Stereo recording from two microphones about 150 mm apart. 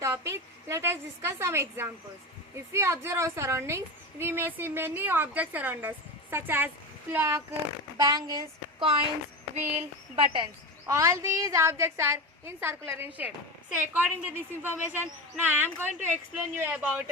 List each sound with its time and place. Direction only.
0.0 s a woman's voice: 20° right (ahead or behind)
7.9 s a woman's voice: 25° right (ahead or behind)
8.8 s a woman's voice: 35° right (ahead or behind)
10.8 s a woman's voice: 20° right (ahead or behind)